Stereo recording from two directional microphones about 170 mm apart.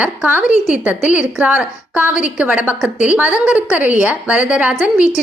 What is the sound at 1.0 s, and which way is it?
Speech, 45° left (ahead or behind).